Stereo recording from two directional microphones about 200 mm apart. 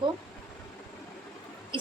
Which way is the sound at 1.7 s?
25° right (ahead or behind).